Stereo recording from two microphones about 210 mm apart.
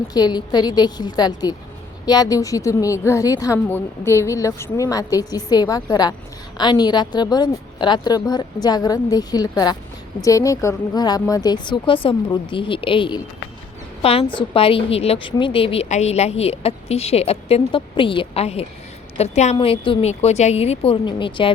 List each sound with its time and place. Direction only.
0.1 s a woman's voice: 20° left (ahead or behind)